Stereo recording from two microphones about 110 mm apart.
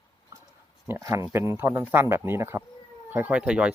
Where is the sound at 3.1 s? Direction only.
15° right (ahead or behind).